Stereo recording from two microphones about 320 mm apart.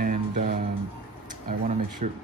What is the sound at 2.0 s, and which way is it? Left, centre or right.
Speech, right.